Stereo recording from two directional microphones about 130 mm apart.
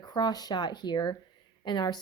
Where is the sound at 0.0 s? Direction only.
30° left (ahead or behind).